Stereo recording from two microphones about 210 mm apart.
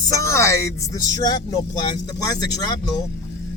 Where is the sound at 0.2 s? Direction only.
15° left (ahead or behind).